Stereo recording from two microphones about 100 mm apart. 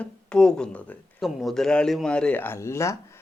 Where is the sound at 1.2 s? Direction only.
Centre (ahead or behind).